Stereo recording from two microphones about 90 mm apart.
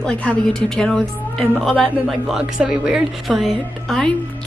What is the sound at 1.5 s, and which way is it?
Speech, 5° right (ahead or behind).